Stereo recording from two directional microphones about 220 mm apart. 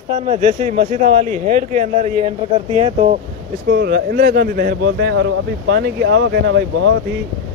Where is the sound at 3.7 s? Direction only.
45° right (ahead or behind).